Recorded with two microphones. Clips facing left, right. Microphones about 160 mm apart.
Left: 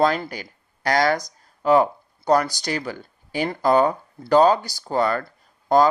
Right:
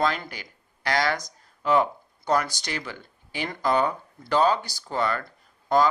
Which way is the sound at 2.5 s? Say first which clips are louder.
Left 7 dB; 40° left (ahead or behind).